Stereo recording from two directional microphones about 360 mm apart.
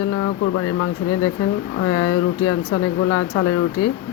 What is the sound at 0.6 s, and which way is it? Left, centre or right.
Speech, left.